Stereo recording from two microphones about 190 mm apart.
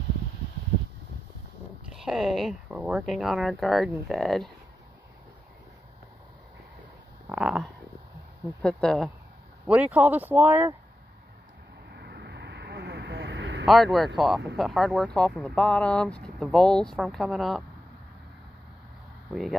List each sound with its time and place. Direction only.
1.9 s speech: centre (ahead or behind)
7.2 s a sound: 5° right (ahead or behind)
8.6 s speech: centre (ahead or behind)
11.9 s vehicle: 65° right (ahead or behind)
13.7 s speech: centre (ahead or behind)